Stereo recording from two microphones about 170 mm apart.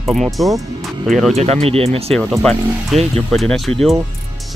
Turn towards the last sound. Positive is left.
turn(degrees=0)  # may be behind; listen again after turning